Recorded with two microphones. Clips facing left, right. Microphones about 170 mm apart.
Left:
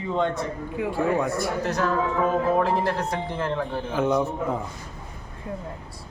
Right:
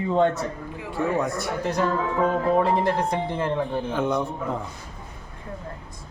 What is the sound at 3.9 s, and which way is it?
Speech, 5° left (ahead or behind).